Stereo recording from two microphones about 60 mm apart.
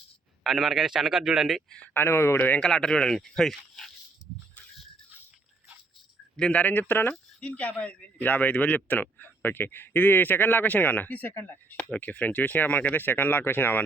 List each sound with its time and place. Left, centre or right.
0.4 s a man's voice: centre
1.9 s speech: left
2.6 s speech: centre
4.2 s a sound: left
6.3 s a man's voice: centre; by 13.8 s left